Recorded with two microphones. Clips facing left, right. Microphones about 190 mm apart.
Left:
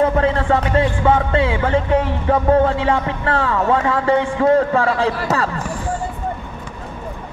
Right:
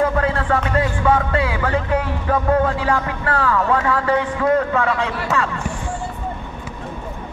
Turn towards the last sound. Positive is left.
turn(degrees=35)  # may be behind; listen again after turning